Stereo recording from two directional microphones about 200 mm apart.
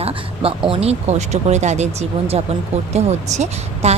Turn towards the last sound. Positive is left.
turn(degrees=-35)  # may be behind; listen again after turning